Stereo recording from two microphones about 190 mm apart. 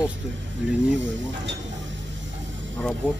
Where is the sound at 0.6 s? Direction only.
70° right (ahead or behind).